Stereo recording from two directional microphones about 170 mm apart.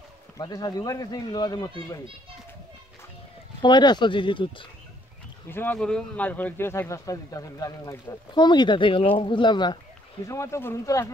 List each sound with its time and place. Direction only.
0.4 s speech: 20° left (ahead or behind)
3.6 s speech: 25° left (ahead or behind)
5.5 s speech: 10° left (ahead or behind)